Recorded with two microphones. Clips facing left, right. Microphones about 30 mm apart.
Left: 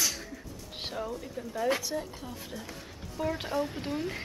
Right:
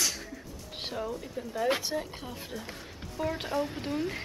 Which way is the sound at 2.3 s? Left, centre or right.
Centre.